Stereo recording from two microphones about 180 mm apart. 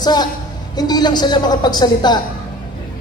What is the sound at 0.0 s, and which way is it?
A woman's voice, 25° left (ahead or behind).